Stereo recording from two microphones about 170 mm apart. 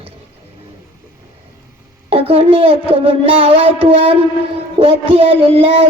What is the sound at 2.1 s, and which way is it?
Child singing, 35° right (ahead or behind).